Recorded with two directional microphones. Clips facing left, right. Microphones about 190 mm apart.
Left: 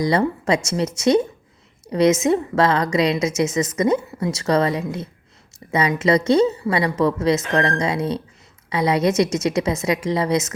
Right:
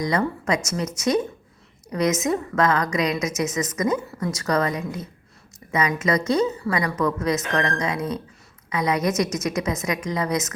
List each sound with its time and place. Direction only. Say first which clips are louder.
0.0 s a woman's voice: left 4 dB; 30° left (ahead or behind)